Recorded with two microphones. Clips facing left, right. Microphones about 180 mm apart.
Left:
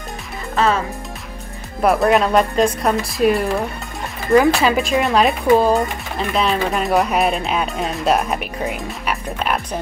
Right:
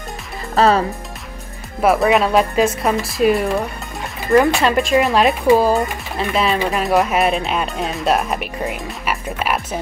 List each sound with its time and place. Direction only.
0.6 s speech: 35° right (ahead or behind)
1.8 s speech: centre (ahead or behind)